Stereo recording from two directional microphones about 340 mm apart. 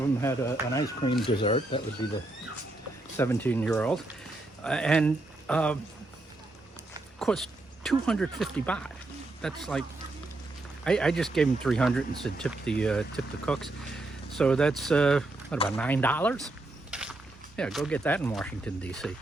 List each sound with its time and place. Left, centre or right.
0.2 s speech: centre
7.2 s speech: centre
10.8 s speech: centre
16.9 s a sound: centre
17.6 s speech: centre